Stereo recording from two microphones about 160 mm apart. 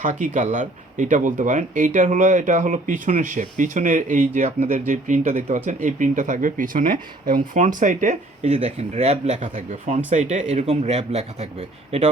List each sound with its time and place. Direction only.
0.0 s speech: 55° right (ahead or behind)